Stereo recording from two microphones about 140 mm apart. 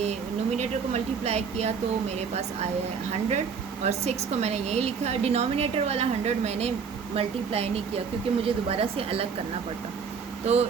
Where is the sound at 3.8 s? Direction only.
50° right (ahead or behind).